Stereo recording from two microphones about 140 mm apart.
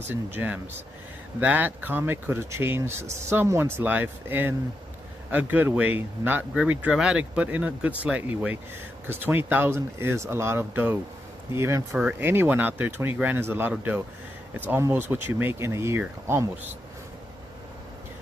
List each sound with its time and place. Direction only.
0.1 s speech: 15° right (ahead or behind)